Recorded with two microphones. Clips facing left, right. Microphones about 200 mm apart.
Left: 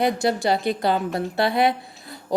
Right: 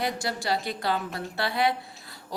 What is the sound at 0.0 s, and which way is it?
A woman's voice, 20° left (ahead or behind).